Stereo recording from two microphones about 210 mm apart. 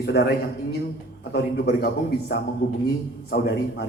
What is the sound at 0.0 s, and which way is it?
A man's voice, 50° left (ahead or behind).